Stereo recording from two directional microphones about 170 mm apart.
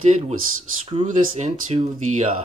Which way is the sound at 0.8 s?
35° right (ahead or behind).